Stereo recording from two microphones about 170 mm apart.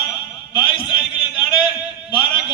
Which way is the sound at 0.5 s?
30° left (ahead or behind).